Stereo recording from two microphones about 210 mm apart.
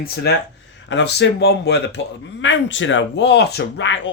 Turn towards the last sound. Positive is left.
turn(degrees=60)  # may be behind; listen again after turning